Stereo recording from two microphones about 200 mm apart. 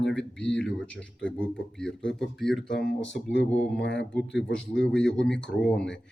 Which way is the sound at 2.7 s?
60° left (ahead or behind).